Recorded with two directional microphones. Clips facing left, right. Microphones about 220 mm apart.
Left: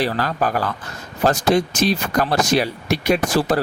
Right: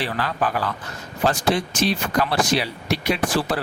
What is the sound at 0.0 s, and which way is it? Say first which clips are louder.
Speech: left 4 dB; 40° left (ahead or behind).